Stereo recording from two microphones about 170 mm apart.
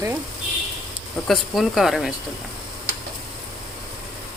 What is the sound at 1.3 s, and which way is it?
Speech, centre (ahead or behind).